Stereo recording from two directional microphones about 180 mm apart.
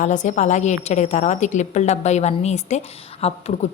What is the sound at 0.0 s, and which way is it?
A woman's voice, 45° left (ahead or behind).